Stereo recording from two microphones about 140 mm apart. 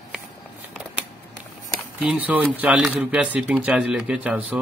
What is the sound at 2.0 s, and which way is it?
Speech, 10° right (ahead or behind).